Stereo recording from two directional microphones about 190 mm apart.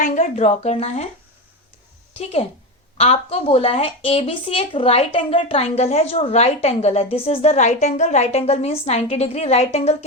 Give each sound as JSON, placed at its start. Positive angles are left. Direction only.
{"t": 0.0, "sound": "speech", "side_deg": 35}
{"t": 2.1, "sound": "speech", "side_deg": 30}